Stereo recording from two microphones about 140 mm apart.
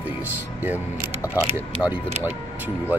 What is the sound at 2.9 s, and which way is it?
Speech, 15° right (ahead or behind).